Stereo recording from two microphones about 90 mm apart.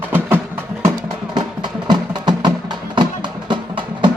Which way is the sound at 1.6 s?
55° right (ahead or behind).